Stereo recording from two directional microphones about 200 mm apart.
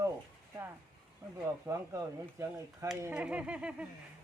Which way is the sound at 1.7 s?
15° right (ahead or behind).